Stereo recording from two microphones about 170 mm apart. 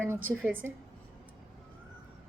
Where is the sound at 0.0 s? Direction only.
10° right (ahead or behind).